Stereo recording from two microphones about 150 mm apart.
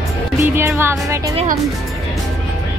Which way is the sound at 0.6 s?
15° right (ahead or behind).